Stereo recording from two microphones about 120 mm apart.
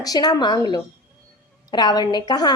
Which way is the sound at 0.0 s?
35° left (ahead or behind).